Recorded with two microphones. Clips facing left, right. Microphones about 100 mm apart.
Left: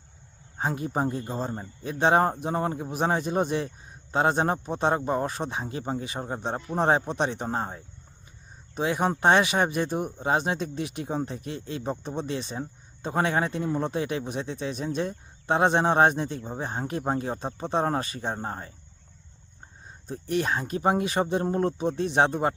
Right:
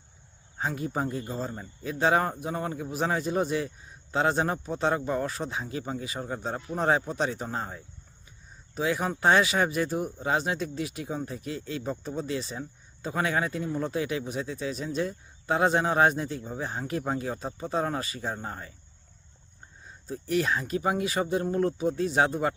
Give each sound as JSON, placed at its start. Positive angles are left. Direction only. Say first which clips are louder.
{"t": 0.6, "sound": "a man's voice", "louder": "left 3 dB", "side_deg": 25}
{"t": 2.9, "sound": "a man's voice", "louder": "left 1 dB", "side_deg": 25}
{"t": 12.5, "sound": "a man's voice", "louder": "left 3 dB", "side_deg": 35}
{"t": 20.1, "sound": "a man's voice", "louder": "even", "side_deg": 25}